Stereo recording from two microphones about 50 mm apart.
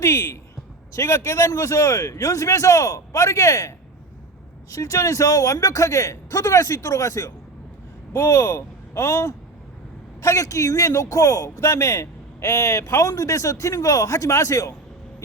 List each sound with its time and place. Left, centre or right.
0.0 s a man's voice: left
4.7 s a man's voice: left
8.1 s speech: left
10.2 s a man's voice: left